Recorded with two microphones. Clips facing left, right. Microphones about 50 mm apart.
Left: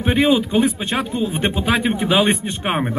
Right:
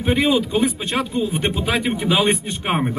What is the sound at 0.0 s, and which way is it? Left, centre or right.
A man's voice, left.